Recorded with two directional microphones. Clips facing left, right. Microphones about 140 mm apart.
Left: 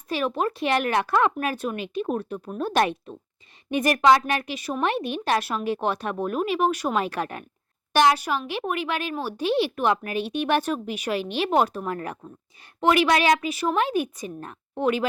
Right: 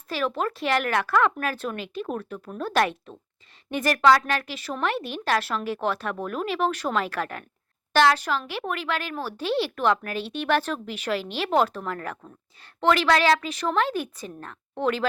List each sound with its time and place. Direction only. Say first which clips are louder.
0.1 s speech: left 2 dB; 20° left (ahead or behind)